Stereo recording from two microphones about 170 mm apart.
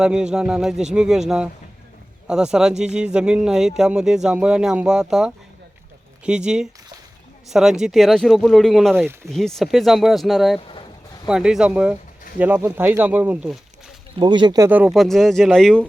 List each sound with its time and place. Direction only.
0.0 s speech: 5° right (ahead or behind)
9.0 s speech: 10° right (ahead or behind)
9.3 s speech: 5° left (ahead or behind)
14.2 s speech: 25° right (ahead or behind)
14.7 s speech: 10° right (ahead or behind)